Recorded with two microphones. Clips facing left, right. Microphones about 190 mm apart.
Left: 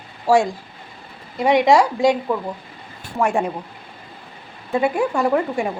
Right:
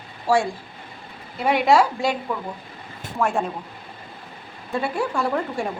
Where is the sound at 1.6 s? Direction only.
15° left (ahead or behind).